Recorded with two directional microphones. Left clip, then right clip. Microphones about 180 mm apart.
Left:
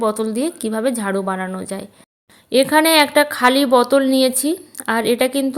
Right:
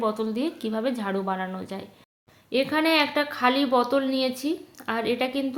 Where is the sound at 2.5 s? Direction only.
50° left (ahead or behind).